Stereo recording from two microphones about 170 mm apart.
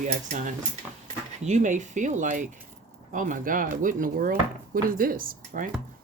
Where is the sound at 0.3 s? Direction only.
50° right (ahead or behind).